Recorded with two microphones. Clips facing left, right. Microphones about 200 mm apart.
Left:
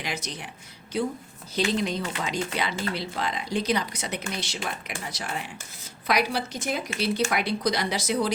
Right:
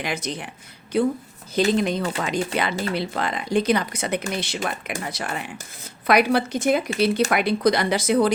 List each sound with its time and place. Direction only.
0.0 s speech: 55° right (ahead or behind)